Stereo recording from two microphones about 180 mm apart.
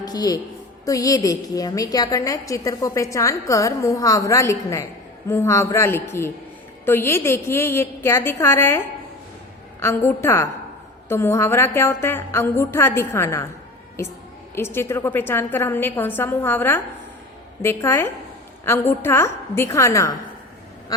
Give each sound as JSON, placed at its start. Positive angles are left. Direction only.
{"t": 0.0, "sound": "a woman's voice", "side_deg": 20}
{"t": 14.5, "sound": "a woman's voice", "side_deg": 15}